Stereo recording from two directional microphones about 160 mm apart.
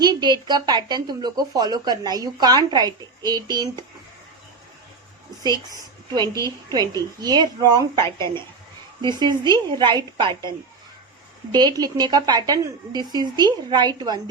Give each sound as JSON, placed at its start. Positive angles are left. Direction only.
{"t": 0.0, "sound": "speech", "side_deg": -25}
{"t": 6.4, "sound": "speech", "side_deg": -25}
{"t": 11.5, "sound": "speech", "side_deg": -25}